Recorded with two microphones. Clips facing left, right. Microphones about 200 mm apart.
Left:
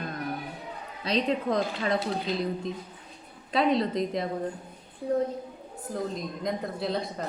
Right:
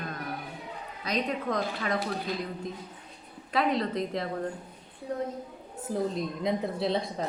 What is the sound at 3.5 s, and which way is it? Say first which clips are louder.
Speech: left 3 dB; 25° left (ahead or behind).